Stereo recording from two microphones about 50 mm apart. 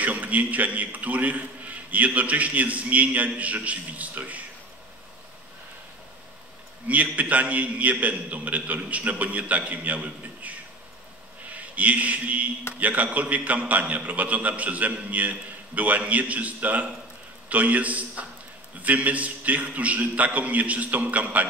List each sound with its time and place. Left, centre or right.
0.0 s a man's voice: right
6.9 s a man's voice: right